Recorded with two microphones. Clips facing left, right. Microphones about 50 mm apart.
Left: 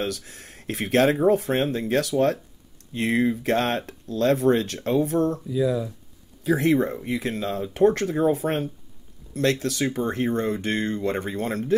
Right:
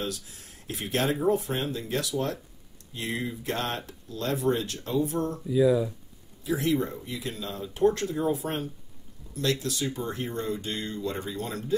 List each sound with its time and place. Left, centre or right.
0.0 s speech: left
5.5 s speech: centre
6.4 s speech: left